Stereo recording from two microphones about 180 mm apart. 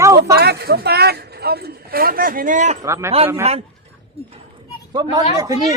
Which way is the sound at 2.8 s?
15° right (ahead or behind).